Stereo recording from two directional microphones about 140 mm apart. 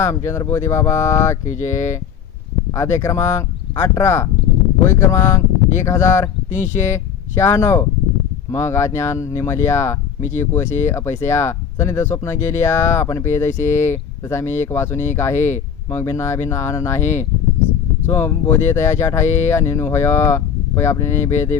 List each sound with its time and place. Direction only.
0.0 s speech: 20° left (ahead or behind)